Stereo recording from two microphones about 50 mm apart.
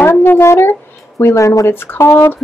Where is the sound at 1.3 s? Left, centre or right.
Left.